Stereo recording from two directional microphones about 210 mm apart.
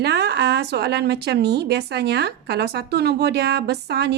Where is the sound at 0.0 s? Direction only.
50° right (ahead or behind).